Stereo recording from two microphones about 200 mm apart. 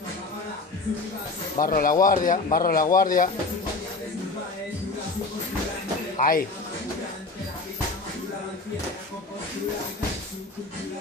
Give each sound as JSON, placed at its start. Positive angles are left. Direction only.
{"t": 1.6, "sound": "speech", "side_deg": 45}
{"t": 6.1, "sound": "speech", "side_deg": 45}